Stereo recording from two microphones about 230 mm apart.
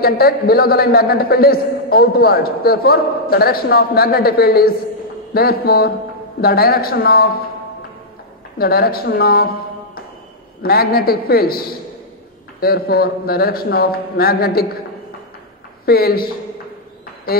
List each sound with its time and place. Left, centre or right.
0.0 s a man's voice: left
8.5 s a man's voice: left
10.6 s a man's voice: left
15.8 s a man's voice: left